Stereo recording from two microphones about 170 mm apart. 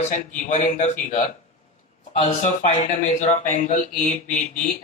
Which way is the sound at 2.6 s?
45° left (ahead or behind).